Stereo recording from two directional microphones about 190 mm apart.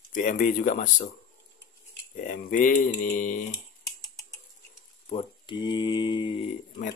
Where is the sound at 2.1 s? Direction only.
45° left (ahead or behind).